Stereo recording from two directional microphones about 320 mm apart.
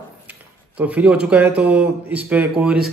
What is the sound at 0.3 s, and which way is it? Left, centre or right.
A man's voice, centre.